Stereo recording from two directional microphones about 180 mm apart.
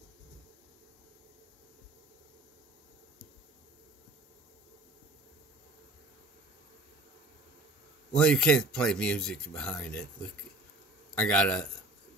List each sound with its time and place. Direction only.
8.1 s speech: 5° left (ahead or behind)
11.1 s a man's voice: 5° left (ahead or behind)